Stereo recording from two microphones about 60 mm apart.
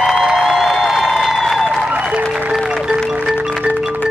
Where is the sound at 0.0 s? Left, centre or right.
Centre.